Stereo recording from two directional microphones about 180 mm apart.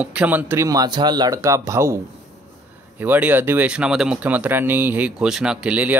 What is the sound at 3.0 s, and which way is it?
Speech, 10° right (ahead or behind).